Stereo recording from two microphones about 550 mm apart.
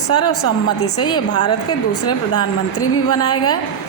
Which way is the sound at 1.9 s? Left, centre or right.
Left.